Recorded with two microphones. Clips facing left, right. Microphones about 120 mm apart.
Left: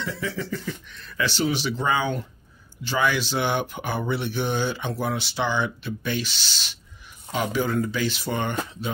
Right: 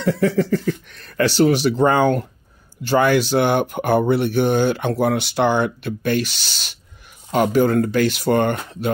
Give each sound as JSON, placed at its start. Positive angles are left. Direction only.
{"t": 0.0, "sound": "speech", "side_deg": -50}